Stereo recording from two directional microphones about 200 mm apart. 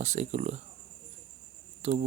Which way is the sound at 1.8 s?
30° right (ahead or behind).